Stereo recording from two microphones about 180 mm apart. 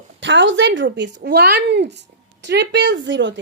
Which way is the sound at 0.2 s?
90° right.